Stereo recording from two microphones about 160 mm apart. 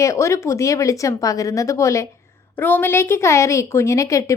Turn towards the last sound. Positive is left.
turn(degrees=20)  # may be behind; listen again after turning